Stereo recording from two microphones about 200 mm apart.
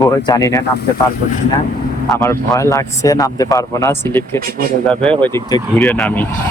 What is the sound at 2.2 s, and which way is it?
Speech, 15° left (ahead or behind).